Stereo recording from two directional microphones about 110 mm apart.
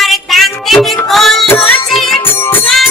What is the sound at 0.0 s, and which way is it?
Music, centre (ahead or behind).